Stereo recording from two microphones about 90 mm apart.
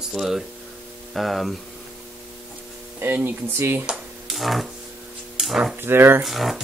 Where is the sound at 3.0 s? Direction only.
25° right (ahead or behind).